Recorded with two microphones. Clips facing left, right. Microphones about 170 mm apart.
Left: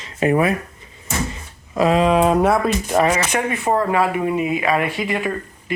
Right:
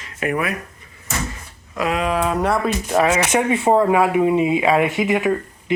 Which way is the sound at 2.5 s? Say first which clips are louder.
Left 2 dB; centre (ahead or behind).